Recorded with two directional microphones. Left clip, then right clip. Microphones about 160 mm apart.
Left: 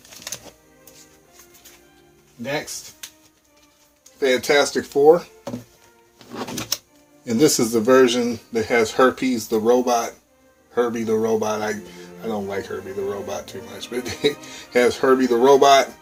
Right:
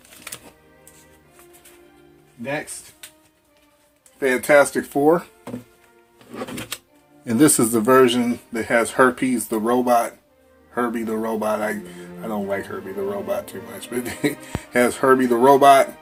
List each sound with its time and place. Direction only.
4.2 s speech: 35° right (ahead or behind)
7.3 s speech: 40° right (ahead or behind)